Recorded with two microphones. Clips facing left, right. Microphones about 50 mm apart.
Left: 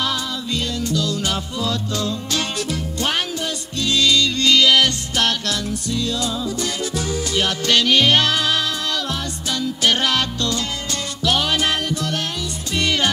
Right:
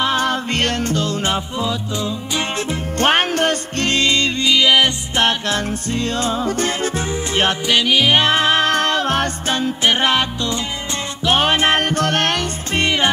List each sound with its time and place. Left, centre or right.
0.2 s music: right; by 2.8 s centre
3.0 s music: right
4.0 s music: right
4.4 s music: centre
5.7 s music: right
7.6 s music: centre
8.2 s music: right
9.8 s music: right
11.2 s music: right
11.8 s music: right
12.7 s music: right